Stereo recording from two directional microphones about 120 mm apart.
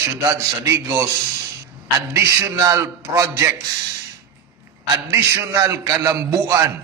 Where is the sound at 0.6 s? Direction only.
25° right (ahead or behind).